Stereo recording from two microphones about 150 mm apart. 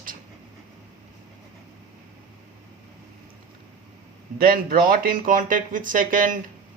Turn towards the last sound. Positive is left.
turn(degrees=-65)  # may be behind; listen again after turning